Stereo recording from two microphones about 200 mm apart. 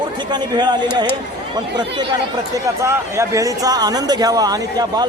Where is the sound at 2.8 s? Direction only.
15° right (ahead or behind).